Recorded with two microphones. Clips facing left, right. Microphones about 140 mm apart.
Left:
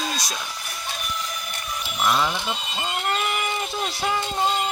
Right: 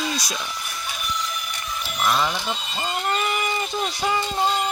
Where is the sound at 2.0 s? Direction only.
5° left (ahead or behind).